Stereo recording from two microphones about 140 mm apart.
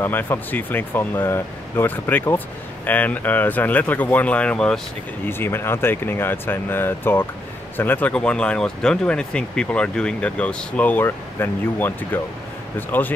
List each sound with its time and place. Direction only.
0.0 s speech: 15° left (ahead or behind)